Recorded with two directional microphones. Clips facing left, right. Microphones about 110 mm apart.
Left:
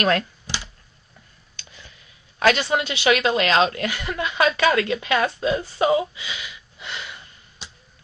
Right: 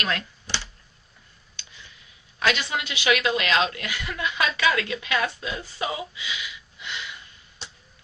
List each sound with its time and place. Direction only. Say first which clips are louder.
0.0 s speech: left 8 dB; 45° left (ahead or behind)
1.5 s a sound: left 3 dB; 45° left (ahead or behind)
2.4 s a woman's voice: left 6 dB; 40° left (ahead or behind)